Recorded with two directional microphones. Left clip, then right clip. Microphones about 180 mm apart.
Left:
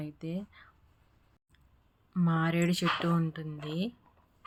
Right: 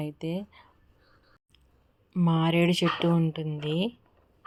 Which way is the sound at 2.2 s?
20° left (ahead or behind).